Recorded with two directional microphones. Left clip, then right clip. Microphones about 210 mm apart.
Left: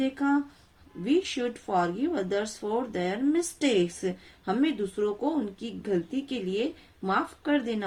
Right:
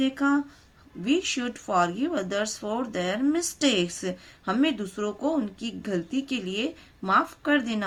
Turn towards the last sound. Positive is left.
turn(degrees=-35)  # may be behind; listen again after turning